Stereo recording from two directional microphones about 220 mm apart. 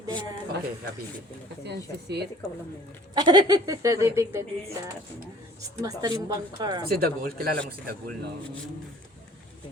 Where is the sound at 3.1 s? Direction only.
20° right (ahead or behind).